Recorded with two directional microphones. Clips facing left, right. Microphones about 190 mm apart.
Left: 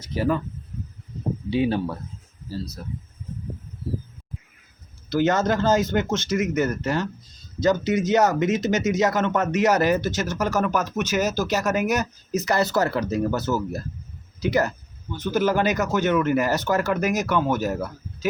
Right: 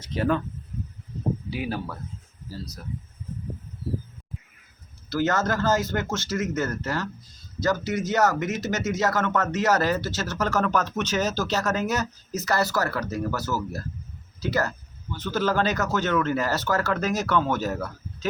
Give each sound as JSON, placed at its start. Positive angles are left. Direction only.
{"t": 0.0, "sound": "speech", "side_deg": 10}
{"t": 1.5, "sound": "speech", "side_deg": 25}
{"t": 5.0, "sound": "speech", "side_deg": 20}